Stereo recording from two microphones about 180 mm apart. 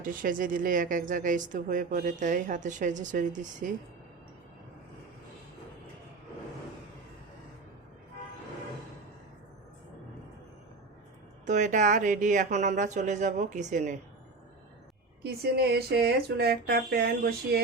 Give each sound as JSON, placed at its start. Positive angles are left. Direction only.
{"t": 0.0, "sound": "a woman's voice", "side_deg": -50}
{"t": 11.4, "sound": "a woman's voice", "side_deg": -45}
{"t": 15.2, "sound": "speech", "side_deg": -65}